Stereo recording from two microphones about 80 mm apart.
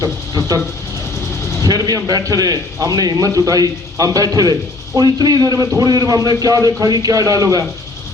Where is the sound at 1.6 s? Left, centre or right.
Right.